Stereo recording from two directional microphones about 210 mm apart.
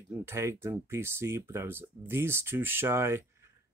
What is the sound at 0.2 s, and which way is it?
Speech, 10° right (ahead or behind).